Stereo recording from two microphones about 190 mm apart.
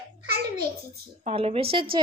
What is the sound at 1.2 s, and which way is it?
Speech, 30° right (ahead or behind).